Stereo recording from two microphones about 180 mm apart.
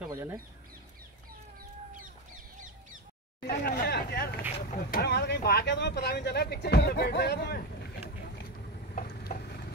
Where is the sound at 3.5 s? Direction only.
60° left (ahead or behind).